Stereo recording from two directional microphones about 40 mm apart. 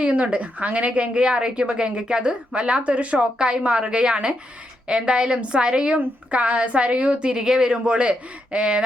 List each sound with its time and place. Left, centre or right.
0.0 s a woman's voice: right